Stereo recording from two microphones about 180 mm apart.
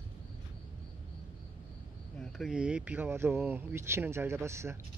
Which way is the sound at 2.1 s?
5° left (ahead or behind).